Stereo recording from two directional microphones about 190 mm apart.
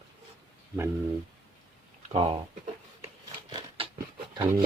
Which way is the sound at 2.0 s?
30° right (ahead or behind).